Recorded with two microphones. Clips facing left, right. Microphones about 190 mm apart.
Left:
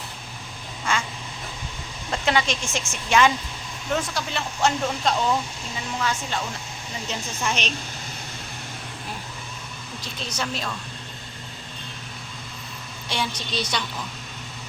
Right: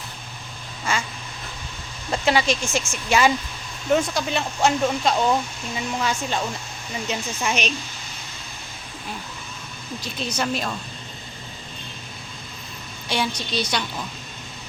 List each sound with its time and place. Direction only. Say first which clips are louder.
0.9 s quack: even; 5° right (ahead or behind)
2.0 s speech: right 3 dB; 5° right (ahead or behind)
10.2 s speech: right 5 dB; 10° right (ahead or behind)
13.1 s a woman's voice: right 3 dB; 5° right (ahead or behind)